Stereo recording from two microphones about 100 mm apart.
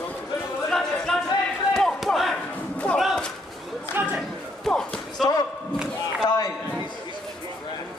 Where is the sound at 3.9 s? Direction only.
20° right (ahead or behind).